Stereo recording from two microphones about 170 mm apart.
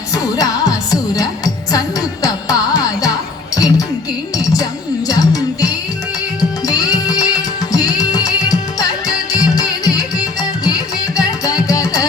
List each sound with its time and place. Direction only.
0.1 s music: 20° left (ahead or behind)
11.2 s music: 20° left (ahead or behind)